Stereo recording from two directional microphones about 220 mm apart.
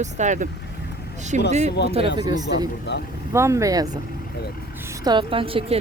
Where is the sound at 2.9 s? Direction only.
50° left (ahead or behind).